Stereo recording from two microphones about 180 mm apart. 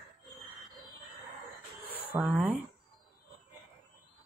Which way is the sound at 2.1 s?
5° right (ahead or behind).